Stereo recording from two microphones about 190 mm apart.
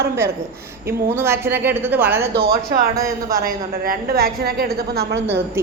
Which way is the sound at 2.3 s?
55° right (ahead or behind).